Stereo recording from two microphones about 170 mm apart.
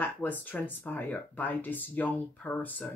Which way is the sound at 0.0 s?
10° left (ahead or behind).